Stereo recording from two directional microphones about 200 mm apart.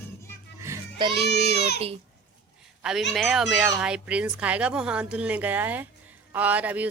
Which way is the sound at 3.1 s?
Centre (ahead or behind).